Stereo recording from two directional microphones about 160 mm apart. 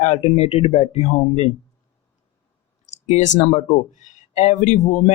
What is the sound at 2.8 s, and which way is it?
A man's voice, 45° left (ahead or behind).